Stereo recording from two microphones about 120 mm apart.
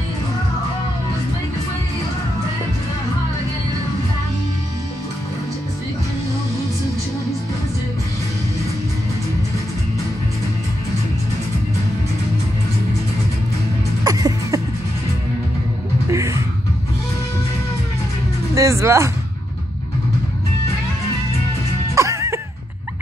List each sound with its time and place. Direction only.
14.0 s music: 30° right (ahead or behind)
16.1 s music: 25° right (ahead or behind)
18.5 s music: 25° right (ahead or behind)
21.9 s music: 25° right (ahead or behind)